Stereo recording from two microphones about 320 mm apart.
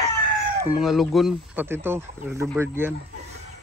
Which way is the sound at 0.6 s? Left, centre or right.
Centre.